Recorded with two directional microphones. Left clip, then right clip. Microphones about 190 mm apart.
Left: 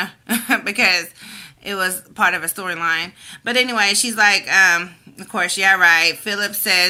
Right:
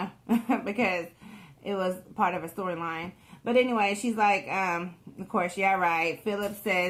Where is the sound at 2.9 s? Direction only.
15° left (ahead or behind).